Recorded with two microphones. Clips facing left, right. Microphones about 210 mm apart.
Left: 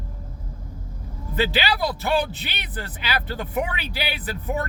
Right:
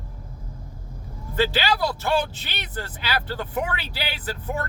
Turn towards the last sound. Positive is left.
turn(degrees=15)  # may be behind; listen again after turning